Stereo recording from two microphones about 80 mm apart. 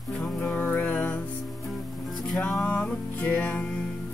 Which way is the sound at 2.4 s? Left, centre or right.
Centre.